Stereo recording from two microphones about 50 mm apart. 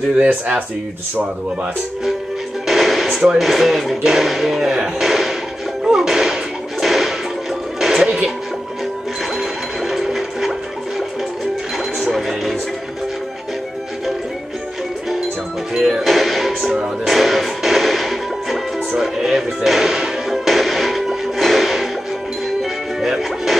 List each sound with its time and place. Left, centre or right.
0.3 s speech: right
2.6 s music: centre
3.3 s speech: centre
5.9 s music: centre
9.4 s ratchet: centre
12.1 s music: centre
15.7 s music: centre